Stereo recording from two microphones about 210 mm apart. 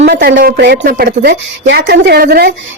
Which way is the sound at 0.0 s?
45° right (ahead or behind).